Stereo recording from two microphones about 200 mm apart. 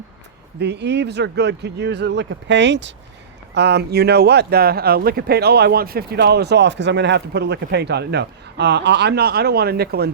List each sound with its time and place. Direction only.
0.6 s speech: 60° right (ahead or behind)